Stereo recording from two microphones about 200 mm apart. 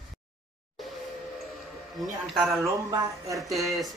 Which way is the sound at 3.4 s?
Centre (ahead or behind).